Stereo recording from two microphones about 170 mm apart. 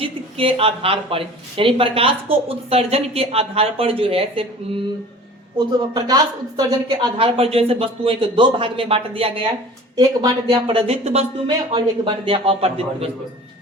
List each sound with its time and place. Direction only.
0.0 s speech: 35° right (ahead or behind)
5.5 s speech: 20° right (ahead or behind)
7.2 s speech: 35° right (ahead or behind)
9.9 s speech: 25° right (ahead or behind)